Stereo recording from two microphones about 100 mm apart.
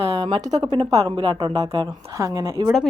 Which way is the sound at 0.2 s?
55° right (ahead or behind).